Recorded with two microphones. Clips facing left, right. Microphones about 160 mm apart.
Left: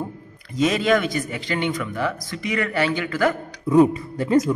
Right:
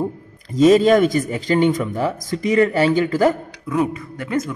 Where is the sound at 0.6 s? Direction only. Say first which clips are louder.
Right 7 dB; 40° right (ahead or behind).